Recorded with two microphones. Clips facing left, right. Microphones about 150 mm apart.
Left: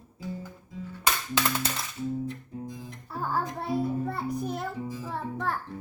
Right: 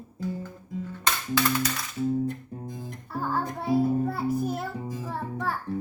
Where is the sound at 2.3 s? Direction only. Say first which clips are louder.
Right 2 dB; 50° right (ahead or behind).